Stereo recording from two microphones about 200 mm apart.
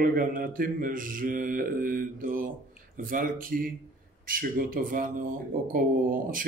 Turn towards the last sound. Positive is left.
turn(degrees=-45)  # may be behind; listen again after turning